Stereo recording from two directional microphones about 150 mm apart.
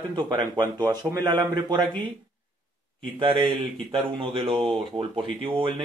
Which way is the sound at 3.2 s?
35° right (ahead or behind).